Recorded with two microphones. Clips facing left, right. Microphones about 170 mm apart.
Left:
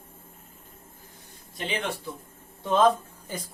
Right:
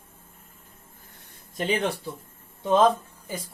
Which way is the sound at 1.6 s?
45° right (ahead or behind).